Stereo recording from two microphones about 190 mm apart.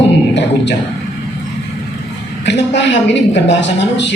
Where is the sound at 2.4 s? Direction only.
65° left (ahead or behind).